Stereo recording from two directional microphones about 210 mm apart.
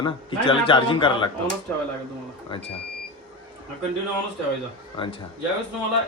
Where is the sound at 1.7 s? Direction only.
10° left (ahead or behind).